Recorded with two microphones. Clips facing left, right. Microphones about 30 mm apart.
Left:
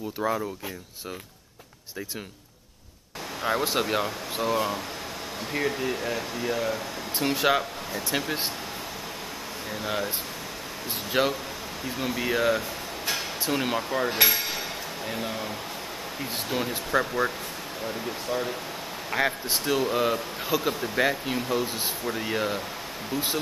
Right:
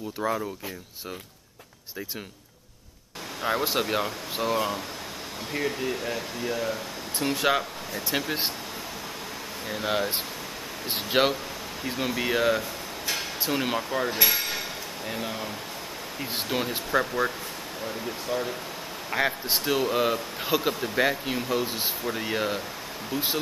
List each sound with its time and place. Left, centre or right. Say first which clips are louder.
0.2 s speech: left 1 dB; centre
3.4 s speech: even; centre
9.7 s speech: right 3 dB; centre
11.1 s speech: right 2 dB; right
12.2 s speech: even; centre
13.1 s a sound: even; centre
15.0 s speech: even; centre